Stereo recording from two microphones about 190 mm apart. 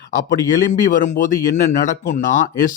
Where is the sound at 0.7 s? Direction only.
45° left (ahead or behind).